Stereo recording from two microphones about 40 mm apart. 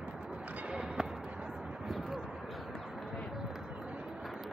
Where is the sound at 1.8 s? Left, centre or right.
Centre.